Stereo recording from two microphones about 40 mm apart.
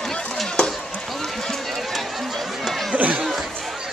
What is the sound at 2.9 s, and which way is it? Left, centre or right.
Chatter, right.